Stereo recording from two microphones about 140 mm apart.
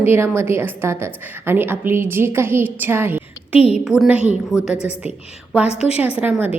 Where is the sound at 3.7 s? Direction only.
5° right (ahead or behind).